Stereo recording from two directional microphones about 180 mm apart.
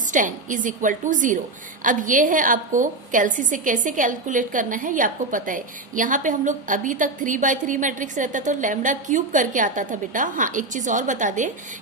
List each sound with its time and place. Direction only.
0.1 s a woman's voice: 45° right (ahead or behind)